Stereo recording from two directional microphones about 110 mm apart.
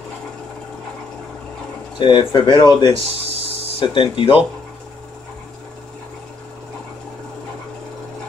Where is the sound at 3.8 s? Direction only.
50° left (ahead or behind).